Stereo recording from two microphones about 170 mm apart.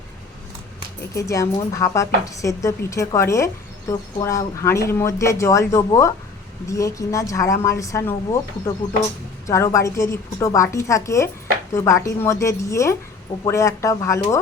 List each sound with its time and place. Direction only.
1.1 s a woman's voice: 20° left (ahead or behind)